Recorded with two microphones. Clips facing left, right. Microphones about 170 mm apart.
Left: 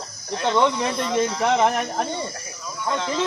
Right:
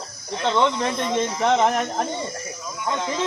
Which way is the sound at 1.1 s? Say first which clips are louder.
Even; centre (ahead or behind).